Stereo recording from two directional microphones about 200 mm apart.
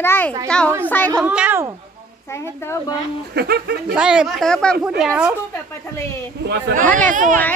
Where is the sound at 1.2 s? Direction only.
5° right (ahead or behind).